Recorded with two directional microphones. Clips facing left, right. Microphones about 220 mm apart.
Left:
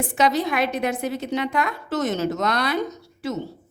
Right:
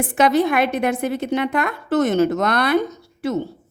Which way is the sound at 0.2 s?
55° right (ahead or behind).